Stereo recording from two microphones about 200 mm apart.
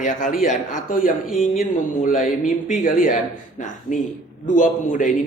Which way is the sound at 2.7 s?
40° left (ahead or behind).